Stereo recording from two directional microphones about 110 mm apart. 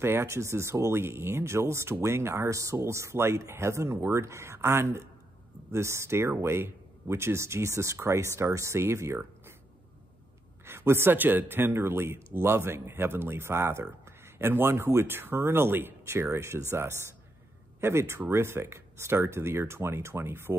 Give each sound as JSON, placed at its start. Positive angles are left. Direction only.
{"t": 0.0, "sound": "speech", "side_deg": -20}
{"t": 10.6, "sound": "speech", "side_deg": -20}